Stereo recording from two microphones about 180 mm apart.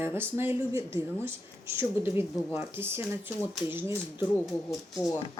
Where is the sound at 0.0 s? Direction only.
15° right (ahead or behind).